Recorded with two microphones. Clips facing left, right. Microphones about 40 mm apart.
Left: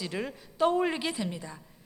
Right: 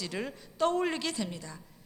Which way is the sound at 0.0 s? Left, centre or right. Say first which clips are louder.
Left 2 dB; centre.